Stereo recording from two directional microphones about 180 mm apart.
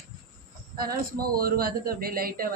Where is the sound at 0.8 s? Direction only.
55° right (ahead or behind).